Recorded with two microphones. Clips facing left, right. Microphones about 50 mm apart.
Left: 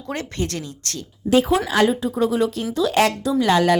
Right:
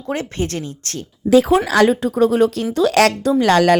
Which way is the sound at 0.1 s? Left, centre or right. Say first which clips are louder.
Right 4 dB; right.